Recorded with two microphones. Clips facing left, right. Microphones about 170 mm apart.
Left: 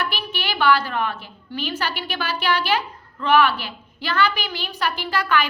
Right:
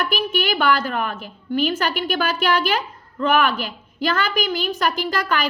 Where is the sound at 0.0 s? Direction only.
45° right (ahead or behind).